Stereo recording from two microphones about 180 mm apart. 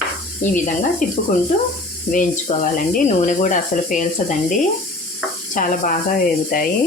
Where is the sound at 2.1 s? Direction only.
50° left (ahead or behind).